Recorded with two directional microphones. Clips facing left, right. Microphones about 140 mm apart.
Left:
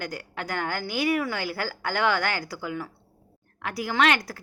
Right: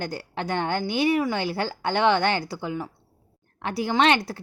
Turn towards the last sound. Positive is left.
turn(degrees=-25)  # may be behind; listen again after turning